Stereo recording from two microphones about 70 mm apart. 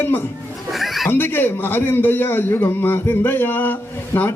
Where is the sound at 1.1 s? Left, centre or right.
Left.